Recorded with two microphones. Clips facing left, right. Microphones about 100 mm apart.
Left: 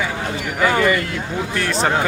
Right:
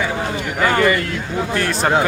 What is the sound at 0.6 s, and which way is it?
Speech, centre (ahead or behind).